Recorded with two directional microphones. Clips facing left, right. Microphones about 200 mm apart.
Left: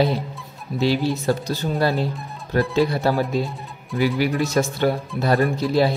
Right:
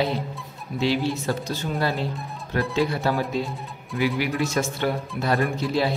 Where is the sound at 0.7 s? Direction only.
35° left (ahead or behind).